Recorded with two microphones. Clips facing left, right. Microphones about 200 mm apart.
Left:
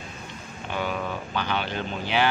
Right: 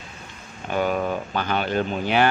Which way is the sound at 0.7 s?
45° right (ahead or behind).